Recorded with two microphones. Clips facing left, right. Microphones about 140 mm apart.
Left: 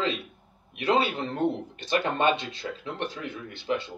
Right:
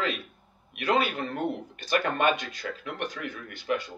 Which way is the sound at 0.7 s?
25° left (ahead or behind).